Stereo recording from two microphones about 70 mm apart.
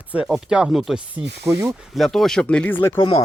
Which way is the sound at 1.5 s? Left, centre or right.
Right.